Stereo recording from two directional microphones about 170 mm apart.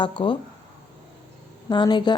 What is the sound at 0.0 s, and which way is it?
Speech, 30° left (ahead or behind).